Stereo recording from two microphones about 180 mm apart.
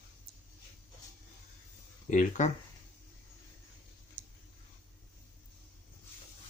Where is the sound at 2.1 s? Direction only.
45° left (ahead or behind).